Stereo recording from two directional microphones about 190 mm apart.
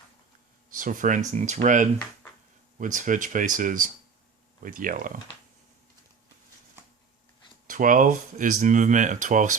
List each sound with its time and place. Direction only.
0.7 s speech: 45° right (ahead or behind)
7.7 s speech: 45° right (ahead or behind)